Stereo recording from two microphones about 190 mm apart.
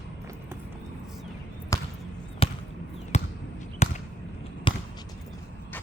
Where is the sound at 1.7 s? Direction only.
15° left (ahead or behind).